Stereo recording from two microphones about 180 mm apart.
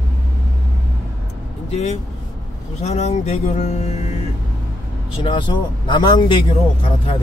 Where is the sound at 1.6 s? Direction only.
40° left (ahead or behind).